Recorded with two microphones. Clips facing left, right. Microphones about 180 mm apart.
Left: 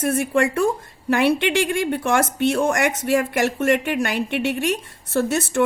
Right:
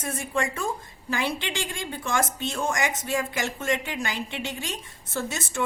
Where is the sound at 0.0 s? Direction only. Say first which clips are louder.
Left 9 dB; 65° left (ahead or behind).